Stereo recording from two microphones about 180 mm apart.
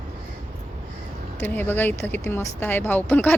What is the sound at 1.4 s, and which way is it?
Speech, 10° left (ahead or behind).